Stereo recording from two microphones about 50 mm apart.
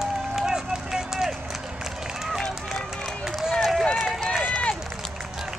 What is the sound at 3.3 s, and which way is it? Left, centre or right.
Run, centre.